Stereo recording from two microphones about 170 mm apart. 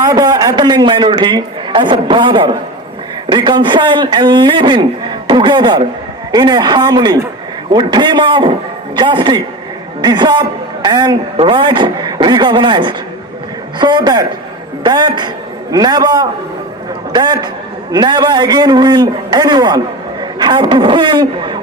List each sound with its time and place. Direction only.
0.0 s speech: 20° right (ahead or behind)